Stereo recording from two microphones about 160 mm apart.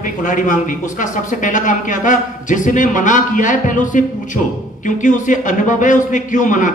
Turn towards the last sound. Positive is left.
turn(degrees=55)  # may be behind; listen again after turning